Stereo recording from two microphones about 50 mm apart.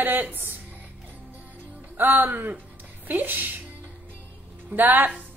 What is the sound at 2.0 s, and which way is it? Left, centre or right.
A woman's voice, right.